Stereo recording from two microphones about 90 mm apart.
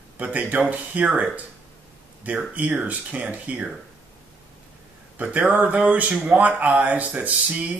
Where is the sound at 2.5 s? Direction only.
15° right (ahead or behind).